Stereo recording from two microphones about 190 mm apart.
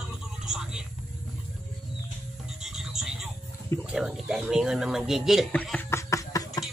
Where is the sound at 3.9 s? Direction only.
5° right (ahead or behind).